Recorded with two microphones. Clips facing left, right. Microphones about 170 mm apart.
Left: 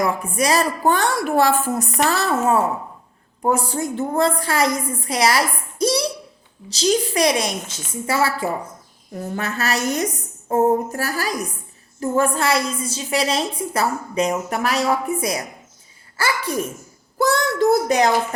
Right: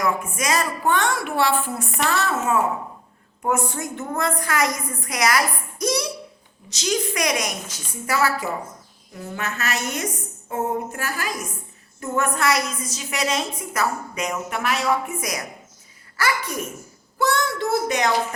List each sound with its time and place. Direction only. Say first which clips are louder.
0.0 s a woman's voice: left 3 dB; 35° left (ahead or behind)